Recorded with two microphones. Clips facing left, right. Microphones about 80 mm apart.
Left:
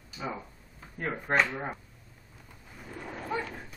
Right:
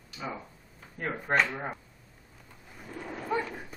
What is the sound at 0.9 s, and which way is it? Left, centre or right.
Speech, centre.